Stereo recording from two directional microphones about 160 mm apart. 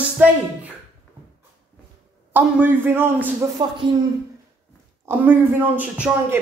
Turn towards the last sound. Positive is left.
turn(degrees=-10)  # may be behind; listen again after turning